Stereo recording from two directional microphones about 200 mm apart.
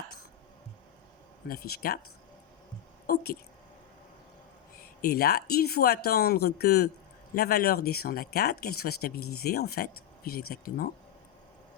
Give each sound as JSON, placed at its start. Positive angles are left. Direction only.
{"t": 1.5, "sound": "speech", "side_deg": 50}
{"t": 5.0, "sound": "speech", "side_deg": 50}